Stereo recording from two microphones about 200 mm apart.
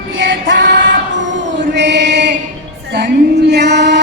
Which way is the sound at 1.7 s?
60° right (ahead or behind).